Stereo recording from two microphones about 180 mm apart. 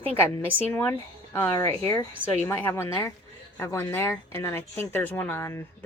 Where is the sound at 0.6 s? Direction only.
10° left (ahead or behind).